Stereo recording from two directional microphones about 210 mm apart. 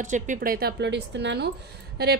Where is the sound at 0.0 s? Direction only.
35° right (ahead or behind).